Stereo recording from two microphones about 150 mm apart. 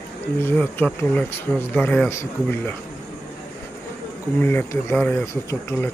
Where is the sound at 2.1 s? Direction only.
15° left (ahead or behind).